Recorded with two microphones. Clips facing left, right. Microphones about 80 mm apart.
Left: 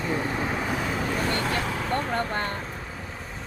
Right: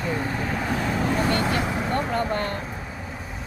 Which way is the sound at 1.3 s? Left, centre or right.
Centre.